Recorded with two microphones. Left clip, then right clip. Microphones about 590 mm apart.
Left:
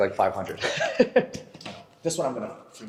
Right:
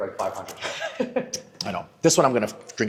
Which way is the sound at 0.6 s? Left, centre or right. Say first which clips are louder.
Left 6 dB; left.